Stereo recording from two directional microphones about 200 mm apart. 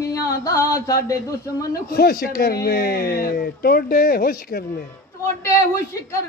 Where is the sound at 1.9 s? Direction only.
50° left (ahead or behind).